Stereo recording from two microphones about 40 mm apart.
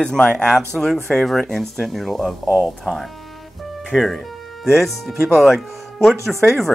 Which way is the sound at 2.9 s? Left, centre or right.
Centre.